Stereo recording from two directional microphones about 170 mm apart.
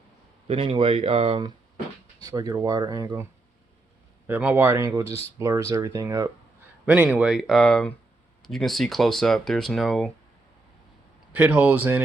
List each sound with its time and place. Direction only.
0.4 s speech: 30° right (ahead or behind)
2.2 s speech: 20° right (ahead or behind)
4.3 s speech: 10° right (ahead or behind)
11.3 s speech: 10° right (ahead or behind)